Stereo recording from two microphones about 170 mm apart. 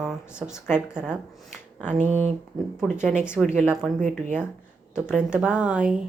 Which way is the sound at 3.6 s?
Centre (ahead or behind).